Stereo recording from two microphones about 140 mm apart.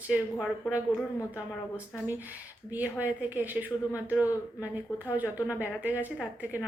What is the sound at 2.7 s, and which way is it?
A woman's voice, 10° right (ahead or behind).